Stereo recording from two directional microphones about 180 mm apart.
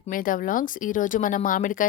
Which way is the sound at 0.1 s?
50° left (ahead or behind).